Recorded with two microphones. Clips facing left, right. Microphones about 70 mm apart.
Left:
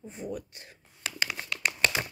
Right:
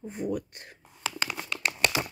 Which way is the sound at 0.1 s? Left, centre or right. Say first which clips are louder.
Right 6 dB; right.